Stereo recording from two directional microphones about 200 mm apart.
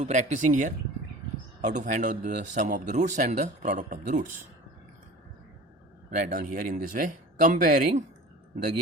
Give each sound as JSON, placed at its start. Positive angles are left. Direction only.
{"t": 0.0, "sound": "speech", "side_deg": -35}
{"t": 6.1, "sound": "speech", "side_deg": -40}